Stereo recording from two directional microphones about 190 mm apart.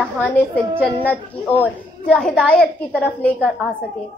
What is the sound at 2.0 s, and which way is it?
A woman's voice, 5° left (ahead or behind).